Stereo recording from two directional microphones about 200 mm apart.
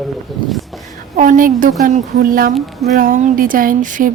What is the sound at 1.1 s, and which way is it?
Speech, 40° right (ahead or behind).